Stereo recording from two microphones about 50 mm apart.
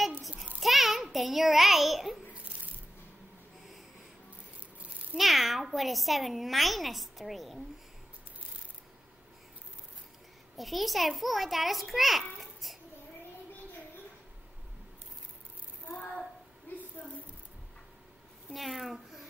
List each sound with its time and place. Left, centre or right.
0.6 s a sound: centre
1.1 s speech: centre
5.1 s speech: centre
10.6 s speech: centre
18.5 s a child's voice: centre